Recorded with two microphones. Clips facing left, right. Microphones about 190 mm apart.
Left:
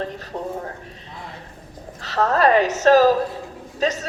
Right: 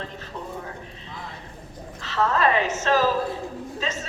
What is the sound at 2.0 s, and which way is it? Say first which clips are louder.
A woman's voice: left 4 dB; 40° left (ahead or behind).